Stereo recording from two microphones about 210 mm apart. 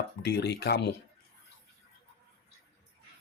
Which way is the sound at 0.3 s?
55° left (ahead or behind).